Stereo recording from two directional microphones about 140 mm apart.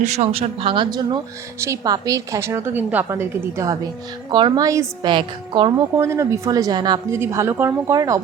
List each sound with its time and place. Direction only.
0.0 s speech: 50° right (ahead or behind); by 1.2 s 30° right (ahead or behind)
1.5 s a woman's voice: 20° right (ahead or behind)
4.3 s a woman's voice: 30° right (ahead or behind)
5.0 s speech: 35° right (ahead or behind)
6.0 s a woman's voice: 20° right (ahead or behind)
7.1 s a woman's voice: 20° right (ahead or behind)